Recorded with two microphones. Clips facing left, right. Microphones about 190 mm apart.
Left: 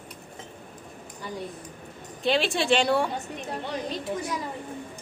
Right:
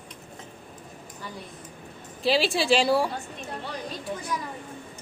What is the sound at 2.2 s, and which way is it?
Speech, centre (ahead or behind).